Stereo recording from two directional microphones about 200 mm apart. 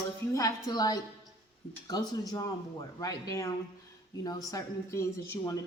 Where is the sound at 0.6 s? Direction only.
20° left (ahead or behind).